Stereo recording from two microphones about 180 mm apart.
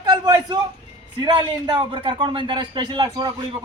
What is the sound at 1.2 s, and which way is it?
A man's voice, 25° right (ahead or behind).